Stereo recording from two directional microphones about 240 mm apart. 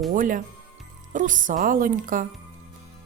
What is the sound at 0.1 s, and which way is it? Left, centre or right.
A woman's voice, right.